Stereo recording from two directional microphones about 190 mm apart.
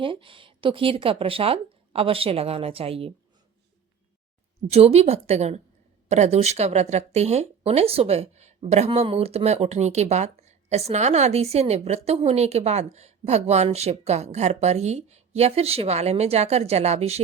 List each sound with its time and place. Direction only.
0.0 s speech: 25° right (ahead or behind)
4.7 s speech: 35° right (ahead or behind)